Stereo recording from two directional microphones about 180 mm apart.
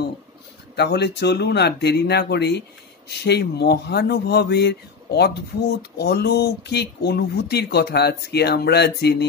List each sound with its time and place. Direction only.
0.7 s speech: 65° left (ahead or behind)